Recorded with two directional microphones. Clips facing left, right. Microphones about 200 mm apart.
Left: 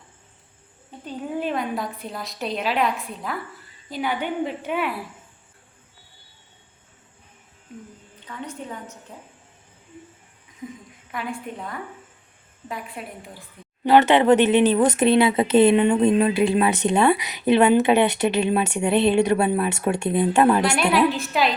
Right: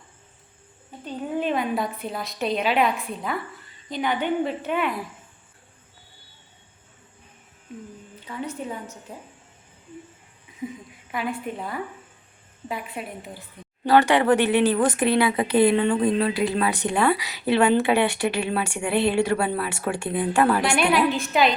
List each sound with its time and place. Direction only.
1.4 s a woman's voice: centre (ahead or behind)
8.3 s a woman's voice: 5° right (ahead or behind)
10.6 s a woman's voice: 10° right (ahead or behind)
13.8 s speech: 20° left (ahead or behind)
20.9 s a woman's voice: centre (ahead or behind)